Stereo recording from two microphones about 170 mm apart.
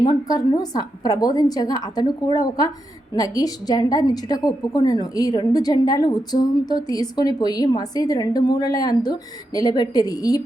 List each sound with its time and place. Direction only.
0.0 s a woman's voice: 20° left (ahead or behind)